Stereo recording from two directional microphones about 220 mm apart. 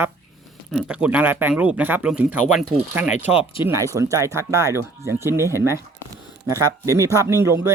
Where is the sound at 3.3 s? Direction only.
25° left (ahead or behind).